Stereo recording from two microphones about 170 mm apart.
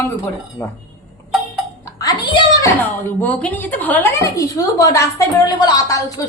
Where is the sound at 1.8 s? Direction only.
20° left (ahead or behind).